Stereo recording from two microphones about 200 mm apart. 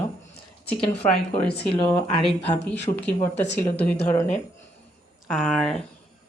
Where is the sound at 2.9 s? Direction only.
30° left (ahead or behind).